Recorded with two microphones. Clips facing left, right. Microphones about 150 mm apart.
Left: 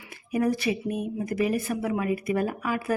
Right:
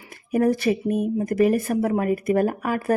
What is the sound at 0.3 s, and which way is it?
Speech, 50° right (ahead or behind).